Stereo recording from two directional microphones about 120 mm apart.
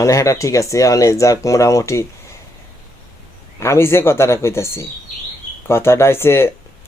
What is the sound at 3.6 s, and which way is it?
Speech, 20° left (ahead or behind).